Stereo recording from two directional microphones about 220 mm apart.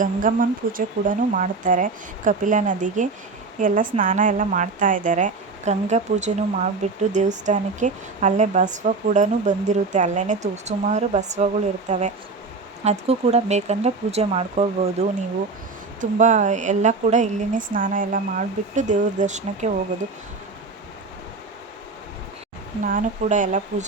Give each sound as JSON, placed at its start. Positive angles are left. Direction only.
{"t": 0.0, "sound": "a woman's voice", "side_deg": -35}
{"t": 22.8, "sound": "a woman's voice", "side_deg": -35}